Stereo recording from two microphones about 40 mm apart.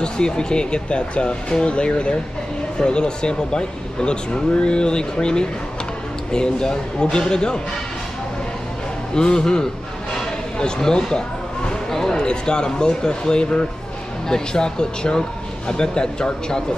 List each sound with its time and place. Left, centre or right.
0.0 s speech: left
9.1 s speech: centre
11.9 s basketball bounce: centre
12.2 s speech: left